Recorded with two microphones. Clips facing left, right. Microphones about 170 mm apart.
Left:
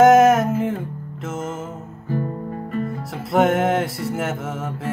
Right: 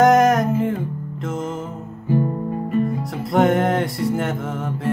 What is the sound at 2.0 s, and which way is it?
Music, 15° right (ahead or behind).